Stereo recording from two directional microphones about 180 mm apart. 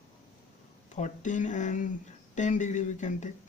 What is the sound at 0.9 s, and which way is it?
Speech, 40° left (ahead or behind).